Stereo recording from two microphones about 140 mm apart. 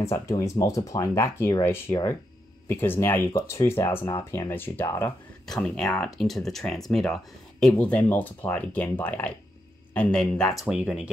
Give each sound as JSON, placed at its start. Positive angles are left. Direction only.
{"t": 0.0, "sound": "speech", "side_deg": 20}
{"t": 5.5, "sound": "speech", "side_deg": 5}